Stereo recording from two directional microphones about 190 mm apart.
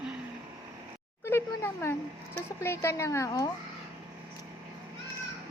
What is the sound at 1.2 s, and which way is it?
A woman's voice, 10° left (ahead or behind).